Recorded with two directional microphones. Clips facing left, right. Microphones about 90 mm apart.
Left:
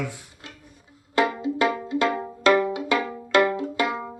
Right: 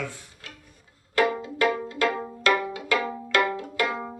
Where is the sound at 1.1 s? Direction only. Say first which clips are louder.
Left 1 dB; 20° left (ahead or behind).